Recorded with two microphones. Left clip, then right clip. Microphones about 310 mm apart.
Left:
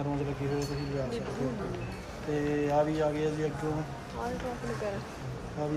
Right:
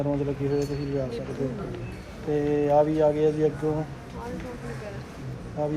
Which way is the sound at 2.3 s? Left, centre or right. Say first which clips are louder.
Right 7 dB; centre.